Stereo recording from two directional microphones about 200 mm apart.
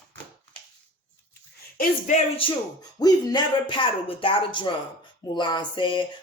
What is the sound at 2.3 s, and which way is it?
Speech, 20° left (ahead or behind).